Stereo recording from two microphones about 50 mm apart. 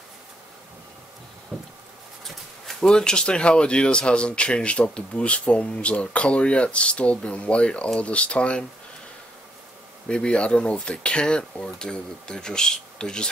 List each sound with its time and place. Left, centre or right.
1.5 s a sound: centre
2.2 s speech: centre; by 8.6 s left
10.0 s speech: left